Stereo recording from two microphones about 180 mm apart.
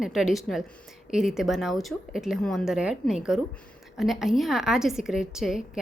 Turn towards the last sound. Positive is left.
turn(degrees=0)  # may be behind; listen again after turning